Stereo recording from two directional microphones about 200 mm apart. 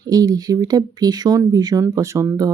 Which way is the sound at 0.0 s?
20° right (ahead or behind).